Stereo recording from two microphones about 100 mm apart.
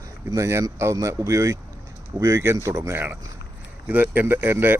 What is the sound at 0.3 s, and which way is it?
Speech, 25° right (ahead or behind).